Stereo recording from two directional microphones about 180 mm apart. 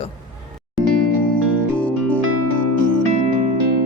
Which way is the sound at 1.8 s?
5° left (ahead or behind).